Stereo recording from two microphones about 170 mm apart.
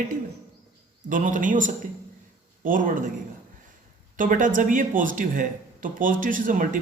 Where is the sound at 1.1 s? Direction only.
50° right (ahead or behind).